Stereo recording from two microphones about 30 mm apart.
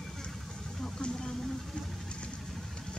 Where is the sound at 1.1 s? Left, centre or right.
Left.